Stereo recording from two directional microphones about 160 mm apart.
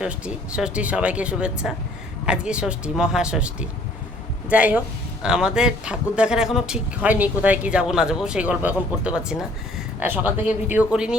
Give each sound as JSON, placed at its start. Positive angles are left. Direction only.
{"t": 0.0, "sound": "speech", "side_deg": -5}